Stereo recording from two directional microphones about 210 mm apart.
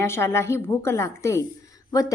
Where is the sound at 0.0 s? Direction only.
15° left (ahead or behind).